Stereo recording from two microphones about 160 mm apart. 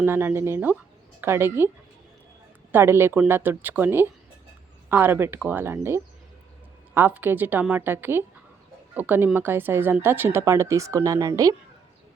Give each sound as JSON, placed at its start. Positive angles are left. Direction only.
{"t": 0.0, "sound": "speech", "side_deg": -15}
{"t": 2.7, "sound": "speech", "side_deg": -15}